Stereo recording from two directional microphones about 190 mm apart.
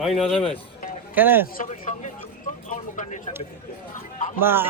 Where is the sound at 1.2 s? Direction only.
10° right (ahead or behind).